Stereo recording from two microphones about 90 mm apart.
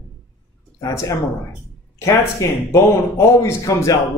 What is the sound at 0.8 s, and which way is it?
Speech, 35° left (ahead or behind).